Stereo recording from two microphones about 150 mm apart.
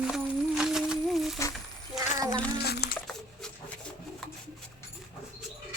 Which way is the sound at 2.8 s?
90° left.